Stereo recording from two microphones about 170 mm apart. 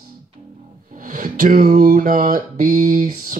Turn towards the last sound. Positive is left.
turn(degrees=-50)  # may be behind; listen again after turning